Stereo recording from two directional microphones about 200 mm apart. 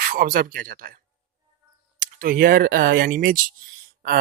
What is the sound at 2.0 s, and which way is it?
Speech, 45° right (ahead or behind).